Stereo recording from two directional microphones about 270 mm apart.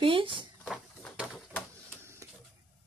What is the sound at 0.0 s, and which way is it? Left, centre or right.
Speech, centre.